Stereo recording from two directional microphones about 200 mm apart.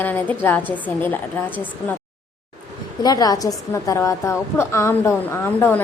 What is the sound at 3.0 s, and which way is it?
A woman's voice, 20° left (ahead or behind).